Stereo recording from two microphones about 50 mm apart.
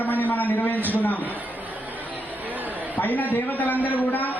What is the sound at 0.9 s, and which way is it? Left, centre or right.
Speech, left.